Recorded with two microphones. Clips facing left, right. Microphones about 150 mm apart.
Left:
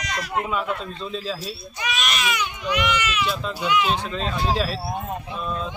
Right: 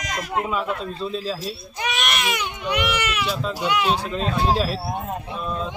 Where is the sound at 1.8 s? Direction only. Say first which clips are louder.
Right 1 dB; 60° right (ahead or behind).